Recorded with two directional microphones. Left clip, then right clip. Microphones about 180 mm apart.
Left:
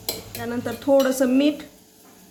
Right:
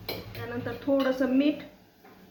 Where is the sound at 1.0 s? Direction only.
90° left.